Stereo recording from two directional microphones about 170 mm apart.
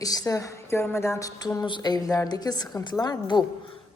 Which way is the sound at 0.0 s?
20° left (ahead or behind).